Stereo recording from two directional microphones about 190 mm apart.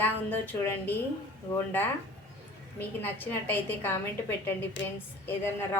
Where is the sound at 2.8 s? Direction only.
10° left (ahead or behind).